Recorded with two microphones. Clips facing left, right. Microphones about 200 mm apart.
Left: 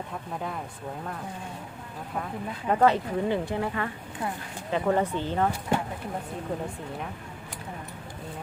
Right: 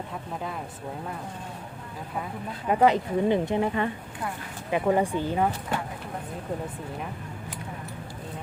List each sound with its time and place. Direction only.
2.6 s speech: 15° right (ahead or behind)